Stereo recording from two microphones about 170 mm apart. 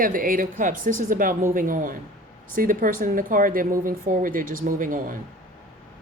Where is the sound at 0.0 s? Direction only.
55° right (ahead or behind).